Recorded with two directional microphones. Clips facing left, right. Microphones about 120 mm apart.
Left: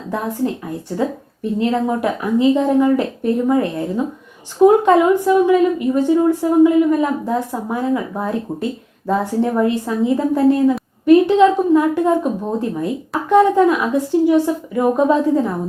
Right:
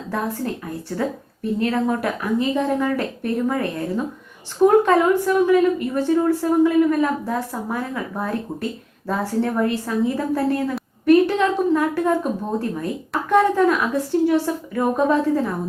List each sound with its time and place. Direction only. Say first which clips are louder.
0.1 s a woman's voice: left 4 dB; 20° left (ahead or behind)